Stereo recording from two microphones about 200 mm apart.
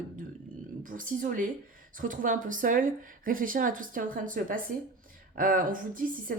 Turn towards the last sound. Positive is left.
turn(degrees=-45)  # may be behind; listen again after turning